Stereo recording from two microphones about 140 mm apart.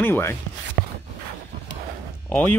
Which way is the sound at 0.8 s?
90° right.